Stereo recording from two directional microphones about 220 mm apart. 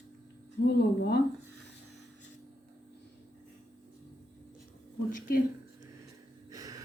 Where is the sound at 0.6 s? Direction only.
50° left (ahead or behind).